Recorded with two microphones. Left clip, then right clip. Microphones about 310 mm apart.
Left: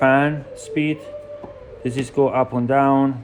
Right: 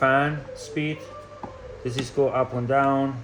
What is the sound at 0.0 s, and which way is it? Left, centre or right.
Speech, left.